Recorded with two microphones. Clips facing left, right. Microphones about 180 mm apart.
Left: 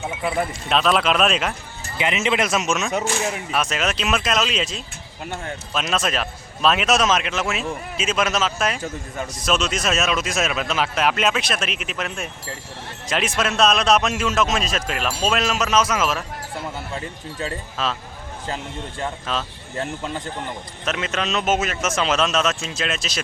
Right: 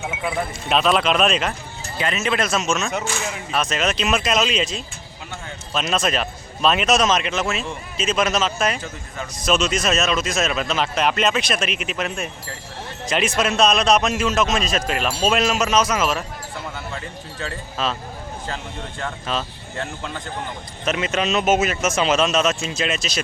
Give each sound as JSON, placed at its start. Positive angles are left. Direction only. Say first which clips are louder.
{"t": 0.0, "sound": "a man's voice", "louder": "left 1 dB", "side_deg": 0}
{"t": 2.0, "sound": "speech", "louder": "left 1 dB", "side_deg": 20}
{"t": 2.9, "sound": "speech", "louder": "left 3 dB", "side_deg": 35}
{"t": 3.5, "sound": "a man's voice", "louder": "right 4 dB", "side_deg": 10}
{"t": 17.8, "sound": "a man's voice", "louder": "right 1 dB", "side_deg": 0}
{"t": 20.8, "sound": "a man's voice", "louder": "right 3 dB", "side_deg": 0}